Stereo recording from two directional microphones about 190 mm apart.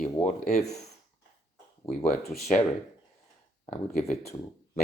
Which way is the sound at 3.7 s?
35° left (ahead or behind).